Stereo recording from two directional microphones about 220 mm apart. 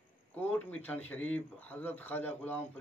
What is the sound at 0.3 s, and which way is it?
Speech, 5° left (ahead or behind).